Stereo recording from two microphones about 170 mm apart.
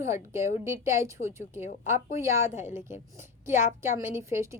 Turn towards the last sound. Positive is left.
turn(degrees=-15)  # may be behind; listen again after turning